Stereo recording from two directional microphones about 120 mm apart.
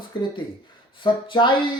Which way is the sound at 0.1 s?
40° left (ahead or behind).